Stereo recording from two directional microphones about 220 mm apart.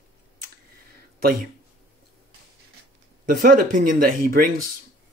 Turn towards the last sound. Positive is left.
turn(degrees=-40)  # may be behind; listen again after turning